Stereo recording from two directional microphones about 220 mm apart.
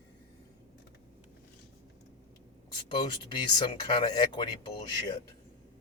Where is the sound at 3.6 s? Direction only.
25° left (ahead or behind).